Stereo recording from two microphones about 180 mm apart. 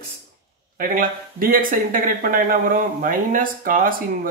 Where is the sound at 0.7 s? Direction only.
50° right (ahead or behind).